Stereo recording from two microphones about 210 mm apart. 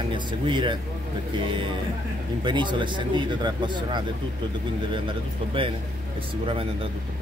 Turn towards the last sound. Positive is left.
turn(degrees=-25)  # may be behind; listen again after turning